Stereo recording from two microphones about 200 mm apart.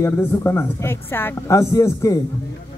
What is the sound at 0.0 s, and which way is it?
A woman's voice, 10° left (ahead or behind).